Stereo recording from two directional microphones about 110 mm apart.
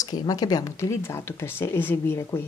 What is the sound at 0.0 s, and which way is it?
Speech, 35° left (ahead or behind).